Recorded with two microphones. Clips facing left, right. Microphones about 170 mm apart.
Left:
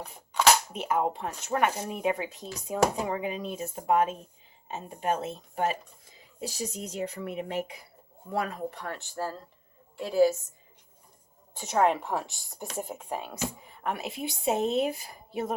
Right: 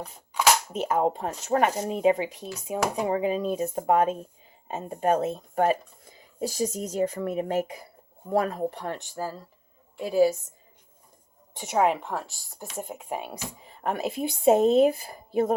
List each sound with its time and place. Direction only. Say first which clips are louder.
0.7 s speech: right 4 dB; 40° right (ahead or behind); by 3.2 s 20° right (ahead or behind)
3.2 s speech: right 7 dB; 35° right (ahead or behind)
9.0 s speech: right 1 dB; 10° right (ahead or behind)
11.6 s speech: right 1 dB; 10° right (ahead or behind)
13.1 s speech: right 2 dB; 15° right (ahead or behind)
13.8 s speech: right 5 dB; 45° right (ahead or behind)